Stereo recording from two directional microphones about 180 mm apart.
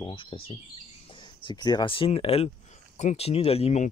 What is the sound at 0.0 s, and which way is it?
Speech, 30° left (ahead or behind).